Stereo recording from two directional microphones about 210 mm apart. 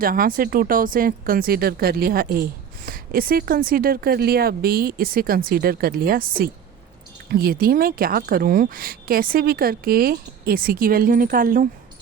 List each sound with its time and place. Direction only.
0.0 s speech: 40° right (ahead or behind)